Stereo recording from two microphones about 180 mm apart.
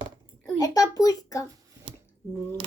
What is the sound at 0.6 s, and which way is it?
Speech, 20° left (ahead or behind).